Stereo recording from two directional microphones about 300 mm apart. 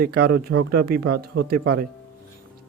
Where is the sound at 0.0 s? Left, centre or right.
Right.